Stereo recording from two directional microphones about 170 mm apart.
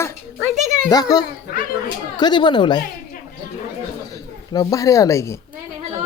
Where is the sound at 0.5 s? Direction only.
45° right (ahead or behind).